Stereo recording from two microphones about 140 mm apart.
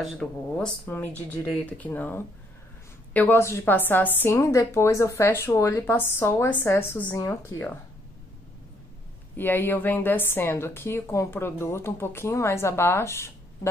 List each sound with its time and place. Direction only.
0.0 s a woman's voice: centre (ahead or behind); by 7.8 s 20° left (ahead or behind)
9.4 s a woman's voice: 15° left (ahead or behind)